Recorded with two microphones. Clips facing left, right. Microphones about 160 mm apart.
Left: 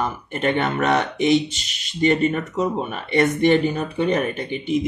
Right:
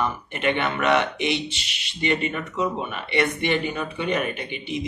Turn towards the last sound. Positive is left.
turn(degrees=45)  # may be behind; listen again after turning